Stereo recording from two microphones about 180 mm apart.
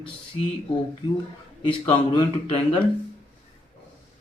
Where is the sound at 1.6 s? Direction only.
25° left (ahead or behind).